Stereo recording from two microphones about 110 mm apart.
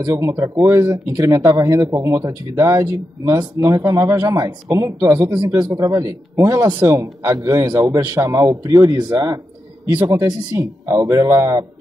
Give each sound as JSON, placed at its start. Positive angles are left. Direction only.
{"t": 0.0, "sound": "speech", "side_deg": -30}